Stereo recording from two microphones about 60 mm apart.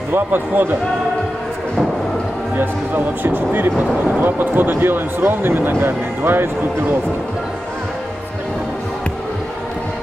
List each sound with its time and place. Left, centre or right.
0.1 s speech: right
3.3 s speech: right